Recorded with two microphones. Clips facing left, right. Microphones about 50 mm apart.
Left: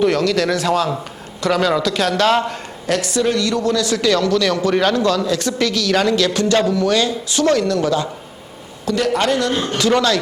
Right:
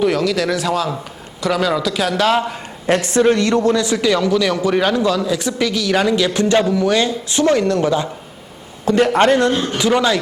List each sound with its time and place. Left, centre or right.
0.0 s a man's voice: centre
2.8 s a man's voice: right
9.7 s a man's voice: centre